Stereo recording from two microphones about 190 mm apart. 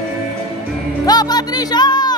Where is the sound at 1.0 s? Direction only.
20° left (ahead or behind).